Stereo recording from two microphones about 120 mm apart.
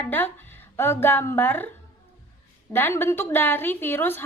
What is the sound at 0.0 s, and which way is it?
Speech, 15° left (ahead or behind).